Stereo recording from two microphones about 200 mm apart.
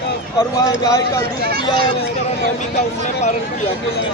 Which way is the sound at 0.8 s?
15° left (ahead or behind).